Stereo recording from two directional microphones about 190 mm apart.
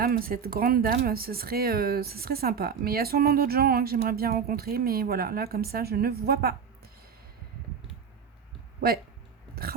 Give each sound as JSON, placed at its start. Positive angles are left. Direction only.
{"t": 0.0, "sound": "speech", "side_deg": -50}